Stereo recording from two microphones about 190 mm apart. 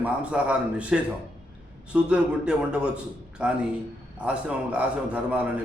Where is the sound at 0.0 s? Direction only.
5° right (ahead or behind).